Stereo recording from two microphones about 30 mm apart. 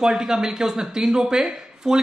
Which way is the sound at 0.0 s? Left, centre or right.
Right.